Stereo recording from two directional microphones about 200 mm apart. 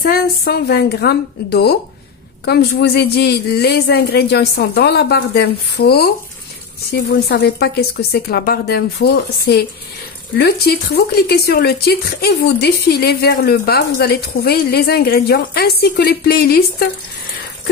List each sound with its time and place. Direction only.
0.0 s speech: 55° left (ahead or behind)